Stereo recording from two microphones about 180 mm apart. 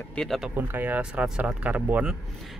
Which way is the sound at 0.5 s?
10° right (ahead or behind).